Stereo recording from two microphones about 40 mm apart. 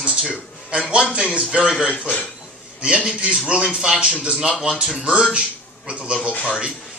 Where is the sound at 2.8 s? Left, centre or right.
Right.